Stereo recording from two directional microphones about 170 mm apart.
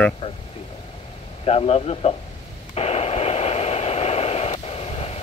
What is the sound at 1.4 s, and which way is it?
Speech, 35° left (ahead or behind).